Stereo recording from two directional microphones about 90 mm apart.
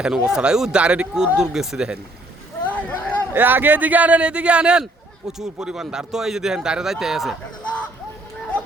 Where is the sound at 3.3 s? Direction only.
20° right (ahead or behind); by 7.3 s 5° right (ahead or behind).